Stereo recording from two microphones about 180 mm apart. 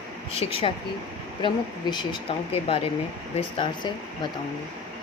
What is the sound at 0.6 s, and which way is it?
A woman's voice, 30° left (ahead or behind).